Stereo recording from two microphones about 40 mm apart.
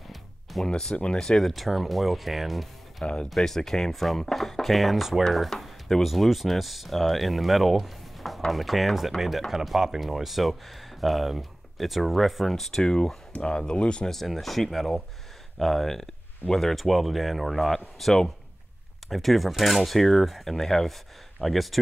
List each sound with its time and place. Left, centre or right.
0.1 s music: centre
0.7 s speech: centre
1.5 s speech: centre
3.0 s speech: left
3.3 s speech: centre
5.5 s a sound: centre
6.0 s speech: centre
13.3 s speech: left
14.0 s speech: centre